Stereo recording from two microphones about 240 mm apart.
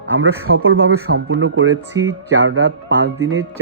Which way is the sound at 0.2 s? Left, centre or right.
Right.